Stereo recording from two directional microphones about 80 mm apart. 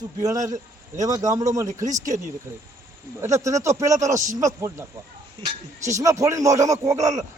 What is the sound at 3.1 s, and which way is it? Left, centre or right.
A man's voice, right.